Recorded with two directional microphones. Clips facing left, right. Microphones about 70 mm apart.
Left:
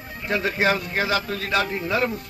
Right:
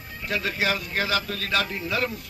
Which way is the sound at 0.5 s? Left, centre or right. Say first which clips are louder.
Left 6 dB; left.